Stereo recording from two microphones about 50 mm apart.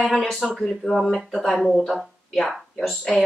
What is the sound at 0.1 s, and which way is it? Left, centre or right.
Speech, centre.